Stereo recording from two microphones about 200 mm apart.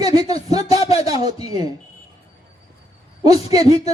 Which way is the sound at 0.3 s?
30° left (ahead or behind).